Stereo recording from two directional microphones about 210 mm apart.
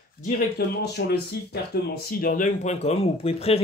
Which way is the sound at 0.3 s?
50° left (ahead or behind).